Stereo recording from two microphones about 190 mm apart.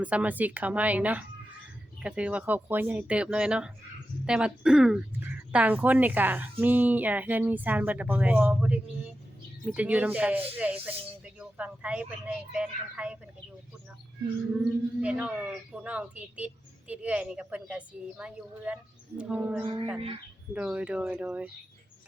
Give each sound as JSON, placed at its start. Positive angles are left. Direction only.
{"t": 0.0, "sound": "speech", "side_deg": -5}
{"t": 14.6, "sound": "speech", "side_deg": -5}
{"t": 19.6, "sound": "speech", "side_deg": -25}
{"t": 20.5, "sound": "speech", "side_deg": -5}